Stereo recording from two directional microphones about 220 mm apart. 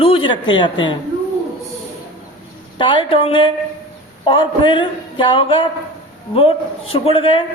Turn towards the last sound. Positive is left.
turn(degrees=25)  # may be behind; listen again after turning